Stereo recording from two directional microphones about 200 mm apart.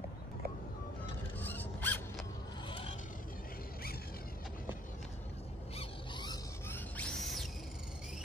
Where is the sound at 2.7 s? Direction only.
30° left (ahead or behind).